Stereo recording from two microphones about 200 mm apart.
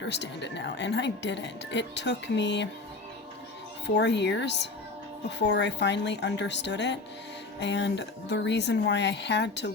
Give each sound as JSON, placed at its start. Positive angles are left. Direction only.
{"t": 0.0, "sound": "speech", "side_deg": 60}
{"t": 3.8, "sound": "speech", "side_deg": 60}